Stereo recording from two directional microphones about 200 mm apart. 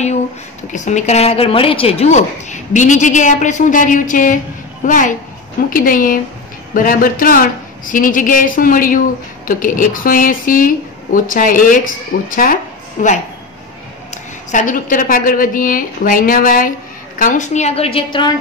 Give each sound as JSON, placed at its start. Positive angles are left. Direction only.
{"t": 0.7, "sound": "a woman's voice", "side_deg": 35}